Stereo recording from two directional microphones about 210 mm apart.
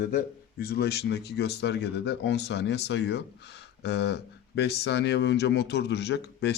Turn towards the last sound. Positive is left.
turn(degrees=50)  # may be behind; listen again after turning